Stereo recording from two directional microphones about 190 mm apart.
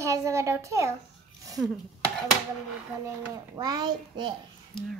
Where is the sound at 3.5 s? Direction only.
20° right (ahead or behind).